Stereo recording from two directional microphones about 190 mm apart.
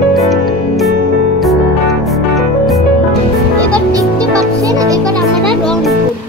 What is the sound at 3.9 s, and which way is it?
Music, 20° right (ahead or behind).